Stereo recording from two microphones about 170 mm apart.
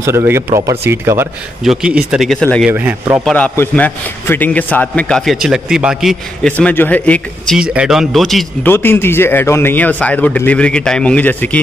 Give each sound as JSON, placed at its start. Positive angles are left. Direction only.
{"t": 0.0, "sound": "speech", "side_deg": -15}
{"t": 1.6, "sound": "speech", "side_deg": -5}
{"t": 2.7, "sound": "speech", "side_deg": -10}
{"t": 3.3, "sound": "a man's voice", "side_deg": 10}
{"t": 6.5, "sound": "a man's voice", "side_deg": 10}
{"t": 7.7, "sound": "speech", "side_deg": -5}
{"t": 8.6, "sound": "a man's voice", "side_deg": 10}